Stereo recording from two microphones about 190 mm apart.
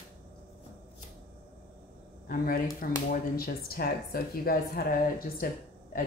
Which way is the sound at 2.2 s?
50° left (ahead or behind).